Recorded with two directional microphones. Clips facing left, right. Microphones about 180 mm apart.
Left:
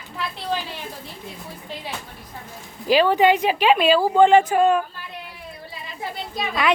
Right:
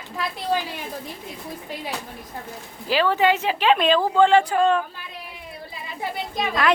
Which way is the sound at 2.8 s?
15° left (ahead or behind).